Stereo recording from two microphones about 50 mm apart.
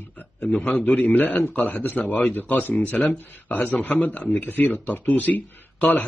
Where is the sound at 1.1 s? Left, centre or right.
Left.